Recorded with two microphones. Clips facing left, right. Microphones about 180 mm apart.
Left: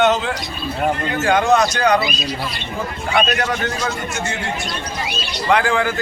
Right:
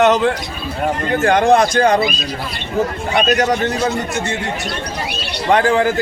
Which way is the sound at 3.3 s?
40° right (ahead or behind).